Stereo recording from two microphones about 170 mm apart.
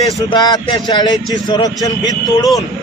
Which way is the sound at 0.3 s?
25° left (ahead or behind).